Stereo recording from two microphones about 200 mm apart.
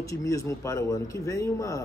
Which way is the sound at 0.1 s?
15° left (ahead or behind).